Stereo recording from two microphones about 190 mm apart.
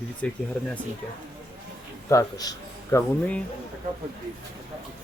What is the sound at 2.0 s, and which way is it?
Speech, 20° left (ahead or behind).